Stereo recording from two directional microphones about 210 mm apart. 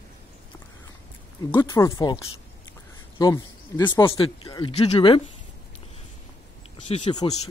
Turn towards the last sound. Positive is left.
turn(degrees=30)  # may be behind; listen again after turning